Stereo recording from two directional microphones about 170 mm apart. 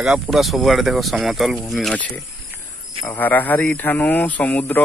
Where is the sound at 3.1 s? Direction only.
10° left (ahead or behind).